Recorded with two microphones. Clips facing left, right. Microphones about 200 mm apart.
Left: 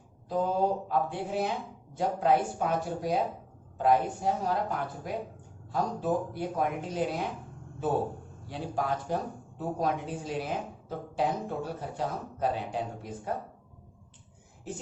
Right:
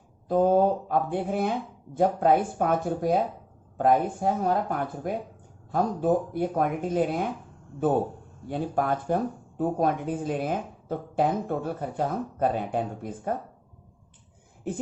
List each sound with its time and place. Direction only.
0.3 s speech: 50° right (ahead or behind)